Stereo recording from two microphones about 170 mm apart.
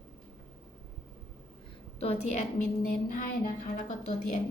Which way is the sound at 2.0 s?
40° left (ahead or behind).